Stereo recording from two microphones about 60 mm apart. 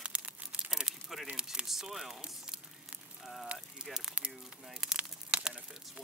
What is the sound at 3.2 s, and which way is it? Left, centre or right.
Speech, centre.